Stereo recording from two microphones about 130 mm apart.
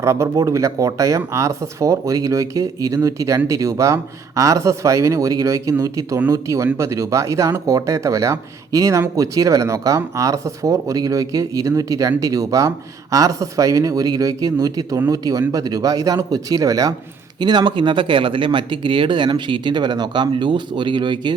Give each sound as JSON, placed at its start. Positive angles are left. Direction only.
{"t": 0.0, "sound": "speech", "side_deg": -20}